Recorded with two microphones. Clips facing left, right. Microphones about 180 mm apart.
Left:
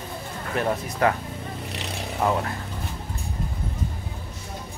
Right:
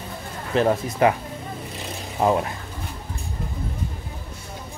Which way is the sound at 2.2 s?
20° right (ahead or behind).